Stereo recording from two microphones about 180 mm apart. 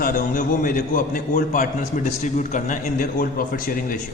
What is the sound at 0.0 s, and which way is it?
A man's voice, 50° left (ahead or behind).